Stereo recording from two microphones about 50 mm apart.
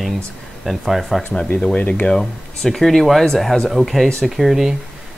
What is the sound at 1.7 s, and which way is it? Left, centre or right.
Speech, left.